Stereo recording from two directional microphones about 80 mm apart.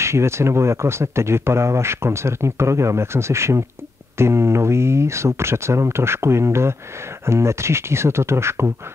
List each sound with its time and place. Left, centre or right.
0.0 s speech: right